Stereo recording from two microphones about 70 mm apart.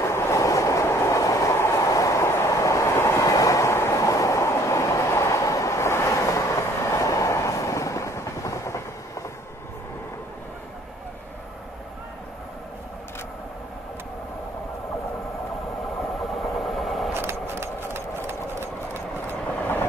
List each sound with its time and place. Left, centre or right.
0.0 s train: left
16.3 s train: centre
17.1 s engine: right